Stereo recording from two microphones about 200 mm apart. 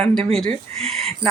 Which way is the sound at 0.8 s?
30° right (ahead or behind).